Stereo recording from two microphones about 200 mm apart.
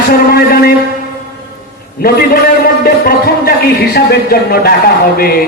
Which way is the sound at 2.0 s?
50° left (ahead or behind).